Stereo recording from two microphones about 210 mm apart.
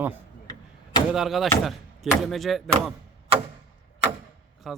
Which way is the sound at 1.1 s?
Centre (ahead or behind).